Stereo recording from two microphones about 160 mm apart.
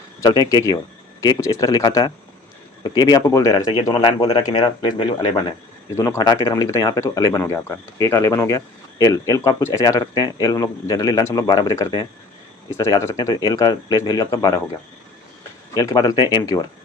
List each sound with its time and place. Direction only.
0.2 s speech: 25° left (ahead or behind)
5.9 s speech: 20° left (ahead or behind)
15.7 s speech: 20° left (ahead or behind)